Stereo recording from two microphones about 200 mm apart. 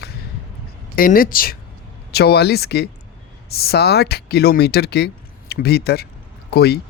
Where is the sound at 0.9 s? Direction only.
45° left (ahead or behind).